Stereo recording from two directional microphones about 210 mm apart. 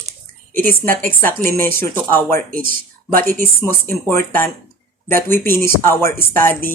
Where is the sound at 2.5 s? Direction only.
40° right (ahead or behind).